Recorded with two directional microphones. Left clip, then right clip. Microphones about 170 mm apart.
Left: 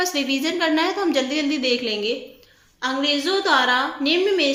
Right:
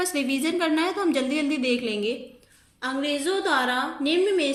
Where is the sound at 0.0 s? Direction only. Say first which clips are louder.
Left 4 dB; 25° right (ahead or behind).